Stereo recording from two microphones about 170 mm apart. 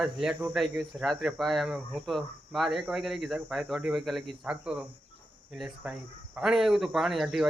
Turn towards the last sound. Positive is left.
turn(degrees=0)  # may be behind; listen again after turning